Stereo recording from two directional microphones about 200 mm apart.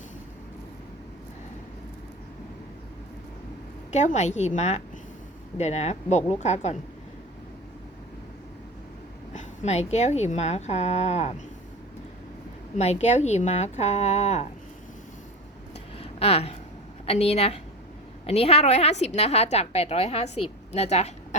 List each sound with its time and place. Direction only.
3.9 s a woman's voice: 35° left (ahead or behind)
9.3 s a woman's voice: 35° left (ahead or behind)
12.7 s a woman's voice: 35° left (ahead or behind)
16.0 s a sound: 30° left (ahead or behind)
17.1 s a woman's voice: 30° left (ahead or behind)